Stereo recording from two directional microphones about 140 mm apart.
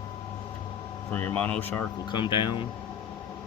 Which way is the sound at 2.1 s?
35° left (ahead or behind).